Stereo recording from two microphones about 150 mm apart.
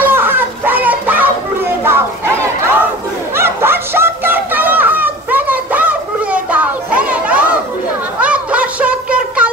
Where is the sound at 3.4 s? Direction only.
15° right (ahead or behind).